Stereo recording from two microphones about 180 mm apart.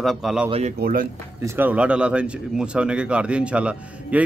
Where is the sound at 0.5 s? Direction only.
35° right (ahead or behind).